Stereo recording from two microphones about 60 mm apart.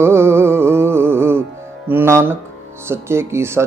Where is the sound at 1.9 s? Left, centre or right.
Right.